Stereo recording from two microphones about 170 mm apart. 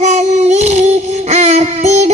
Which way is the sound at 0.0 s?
40° right (ahead or behind).